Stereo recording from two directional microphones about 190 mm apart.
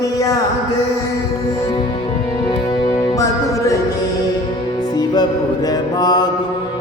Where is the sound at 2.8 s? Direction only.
20° left (ahead or behind).